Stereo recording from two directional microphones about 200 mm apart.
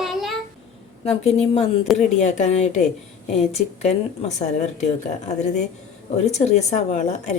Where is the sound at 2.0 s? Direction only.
35° left (ahead or behind).